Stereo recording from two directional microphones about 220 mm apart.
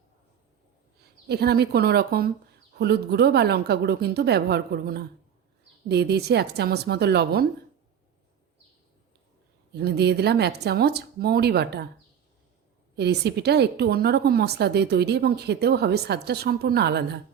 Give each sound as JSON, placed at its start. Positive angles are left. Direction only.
{"t": 1.3, "sound": "a woman's voice", "side_deg": -45}
{"t": 9.7, "sound": "a woman's voice", "side_deg": -45}
{"t": 13.0, "sound": "a woman's voice", "side_deg": -50}